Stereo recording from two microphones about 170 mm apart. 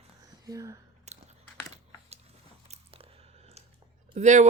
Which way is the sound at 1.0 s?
40° right (ahead or behind).